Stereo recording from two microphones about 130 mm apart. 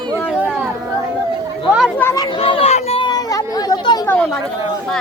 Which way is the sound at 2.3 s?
45° left (ahead or behind).